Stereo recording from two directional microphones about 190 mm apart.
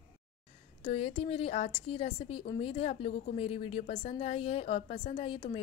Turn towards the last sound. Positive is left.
turn(degrees=25)  # may be behind; listen again after turning